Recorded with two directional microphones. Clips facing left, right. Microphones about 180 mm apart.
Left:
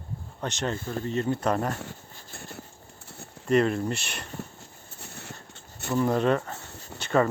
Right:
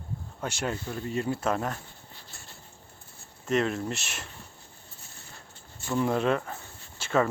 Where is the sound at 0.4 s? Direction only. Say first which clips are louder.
Left 2 dB; 10° right (ahead or behind).